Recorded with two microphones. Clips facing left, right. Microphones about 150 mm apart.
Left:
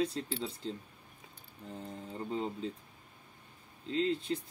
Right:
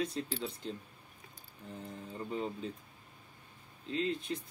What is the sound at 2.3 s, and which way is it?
Speech, 30° left (ahead or behind).